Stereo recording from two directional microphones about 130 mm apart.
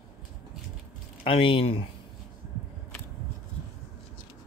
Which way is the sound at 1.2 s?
45° left (ahead or behind).